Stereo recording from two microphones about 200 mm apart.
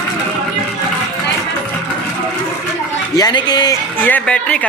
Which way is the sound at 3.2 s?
20° left (ahead or behind).